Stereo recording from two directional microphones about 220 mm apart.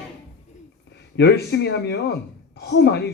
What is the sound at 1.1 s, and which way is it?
Speech, 50° left (ahead or behind).